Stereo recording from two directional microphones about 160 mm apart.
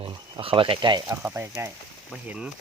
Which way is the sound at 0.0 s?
35° right (ahead or behind).